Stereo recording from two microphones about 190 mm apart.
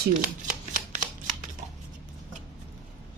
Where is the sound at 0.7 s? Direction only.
45° right (ahead or behind).